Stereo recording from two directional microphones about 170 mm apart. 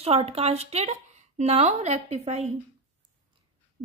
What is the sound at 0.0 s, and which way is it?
A woman's voice, 35° right (ahead or behind).